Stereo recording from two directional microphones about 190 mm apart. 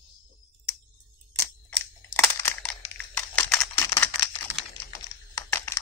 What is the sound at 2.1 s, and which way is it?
Crushing, 10° left (ahead or behind).